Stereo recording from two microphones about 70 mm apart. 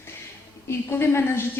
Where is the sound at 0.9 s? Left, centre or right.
Left.